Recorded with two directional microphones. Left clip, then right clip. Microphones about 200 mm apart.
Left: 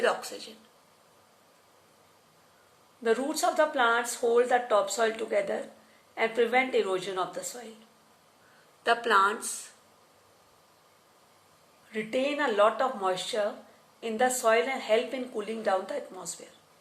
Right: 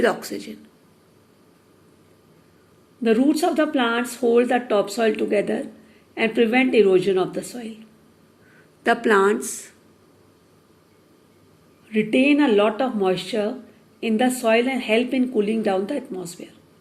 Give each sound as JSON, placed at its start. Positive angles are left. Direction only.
{"t": 0.0, "sound": "speech", "side_deg": -30}
{"t": 3.0, "sound": "speech", "side_deg": -25}
{"t": 9.0, "sound": "speech", "side_deg": -25}
{"t": 11.9, "sound": "speech", "side_deg": -25}